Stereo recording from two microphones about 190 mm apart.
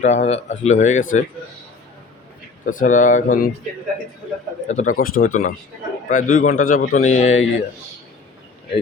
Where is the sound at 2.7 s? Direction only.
45° left (ahead or behind).